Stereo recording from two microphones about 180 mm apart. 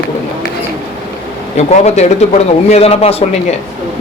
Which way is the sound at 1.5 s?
40° left (ahead or behind).